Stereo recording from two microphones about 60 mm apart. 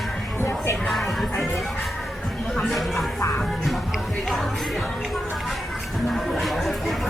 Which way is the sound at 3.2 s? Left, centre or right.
Left.